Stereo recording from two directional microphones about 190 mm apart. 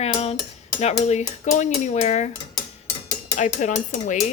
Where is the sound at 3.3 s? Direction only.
40° left (ahead or behind).